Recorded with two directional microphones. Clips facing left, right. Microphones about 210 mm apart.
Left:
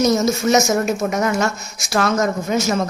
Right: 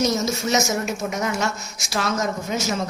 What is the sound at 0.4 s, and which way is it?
Speech, 50° left (ahead or behind).